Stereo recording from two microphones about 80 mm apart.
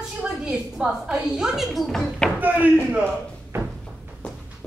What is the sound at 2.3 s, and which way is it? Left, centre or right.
Knock, right.